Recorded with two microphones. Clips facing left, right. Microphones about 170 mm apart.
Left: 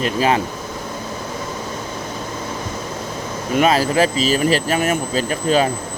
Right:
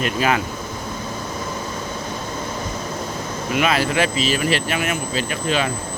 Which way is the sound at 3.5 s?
35° left (ahead or behind).